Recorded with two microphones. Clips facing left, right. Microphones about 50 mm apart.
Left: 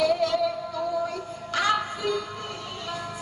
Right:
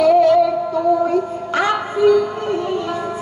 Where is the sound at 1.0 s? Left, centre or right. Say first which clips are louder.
Right 13 dB; right.